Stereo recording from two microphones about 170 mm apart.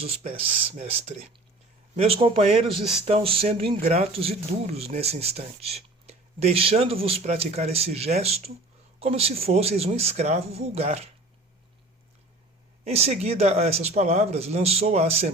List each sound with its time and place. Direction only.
0.0 s speech: 35° right (ahead or behind)
2.0 s speech: 35° right (ahead or behind)
12.8 s speech: 35° right (ahead or behind)